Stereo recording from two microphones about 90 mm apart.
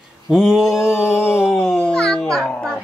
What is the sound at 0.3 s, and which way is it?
Mantra, 5° right (ahead or behind).